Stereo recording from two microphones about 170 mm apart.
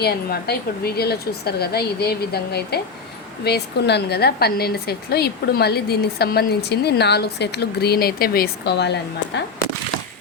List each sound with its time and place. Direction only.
0.0 s a woman's voice: 65° left (ahead or behind); by 9.4 s 80° left